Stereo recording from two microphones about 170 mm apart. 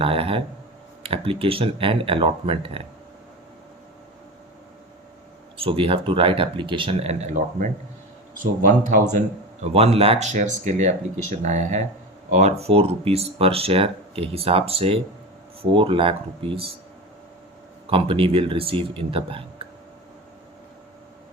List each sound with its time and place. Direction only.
0.0 s speech: 35° right (ahead or behind)
5.5 s a man's voice: 30° right (ahead or behind)
17.8 s speech: 30° right (ahead or behind)